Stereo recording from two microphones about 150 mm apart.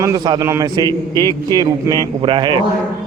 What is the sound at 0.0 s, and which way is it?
A man's voice, 25° right (ahead or behind).